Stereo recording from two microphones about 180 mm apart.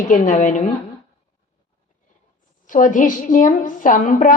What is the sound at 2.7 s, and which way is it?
A woman's voice, 45° left (ahead or behind).